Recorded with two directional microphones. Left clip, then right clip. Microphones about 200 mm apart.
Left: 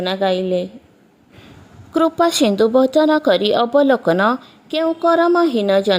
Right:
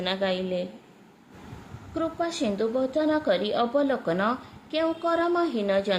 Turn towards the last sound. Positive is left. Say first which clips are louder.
# left 10 dB
turn(degrees=45)  # may be behind; listen again after turning